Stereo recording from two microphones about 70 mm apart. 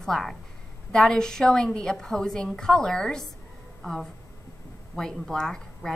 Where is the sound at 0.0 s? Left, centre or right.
Centre.